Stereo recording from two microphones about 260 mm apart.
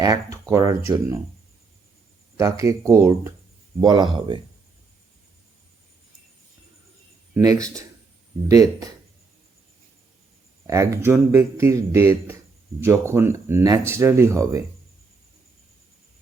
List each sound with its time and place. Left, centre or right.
0.0 s speech: centre
2.4 s speech: centre
7.3 s speech: centre
10.7 s speech: centre